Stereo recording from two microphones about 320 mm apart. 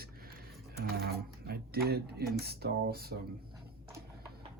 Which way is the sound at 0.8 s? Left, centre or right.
Right.